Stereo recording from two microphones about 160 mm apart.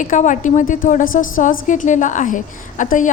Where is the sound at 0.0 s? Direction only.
50° left (ahead or behind).